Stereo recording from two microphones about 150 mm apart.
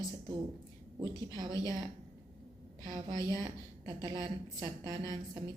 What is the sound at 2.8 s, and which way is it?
A woman's voice, 25° right (ahead or behind).